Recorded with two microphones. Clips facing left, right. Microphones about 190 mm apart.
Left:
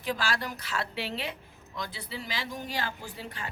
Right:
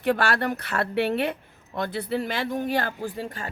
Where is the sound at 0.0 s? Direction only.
65° right (ahead or behind).